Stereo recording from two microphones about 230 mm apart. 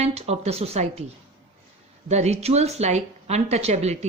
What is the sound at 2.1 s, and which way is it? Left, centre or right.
Speech, right.